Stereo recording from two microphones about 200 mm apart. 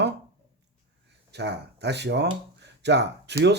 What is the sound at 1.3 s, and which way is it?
Speech, 60° right (ahead or behind).